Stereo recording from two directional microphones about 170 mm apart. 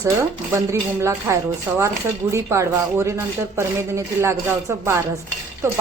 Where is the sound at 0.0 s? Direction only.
15° right (ahead or behind).